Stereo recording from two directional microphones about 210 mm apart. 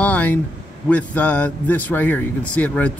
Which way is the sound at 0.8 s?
5° left (ahead or behind).